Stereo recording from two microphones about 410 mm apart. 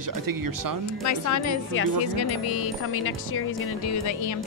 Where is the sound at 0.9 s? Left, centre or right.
Left.